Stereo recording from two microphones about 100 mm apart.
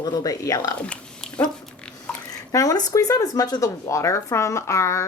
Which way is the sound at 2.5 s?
35° left (ahead or behind).